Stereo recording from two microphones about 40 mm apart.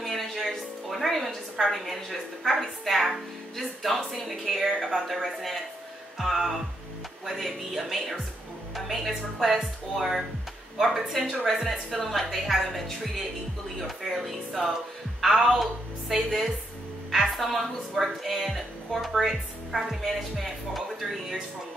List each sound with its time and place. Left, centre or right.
0.0 s a woman's voice: centre